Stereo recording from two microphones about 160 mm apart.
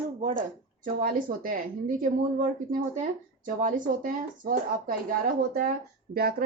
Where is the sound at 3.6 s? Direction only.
55° right (ahead or behind).